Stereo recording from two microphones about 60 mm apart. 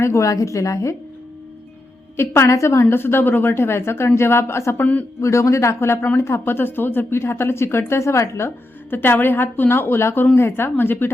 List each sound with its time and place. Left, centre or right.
0.0 s a woman's voice: left
0.3 s a woman's voice: left
2.1 s a woman's voice: left
2.9 s a woman's voice: left
4.8 s speech: left
5.2 s a woman's voice: left